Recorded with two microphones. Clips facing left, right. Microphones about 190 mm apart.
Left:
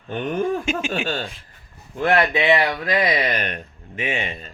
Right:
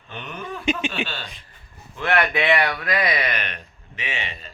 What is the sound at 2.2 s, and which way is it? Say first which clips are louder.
A man's voice: left 2 dB; 25° left (ahead or behind).